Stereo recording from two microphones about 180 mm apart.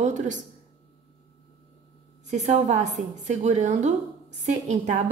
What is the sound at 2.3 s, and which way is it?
A woman's voice, 40° right (ahead or behind).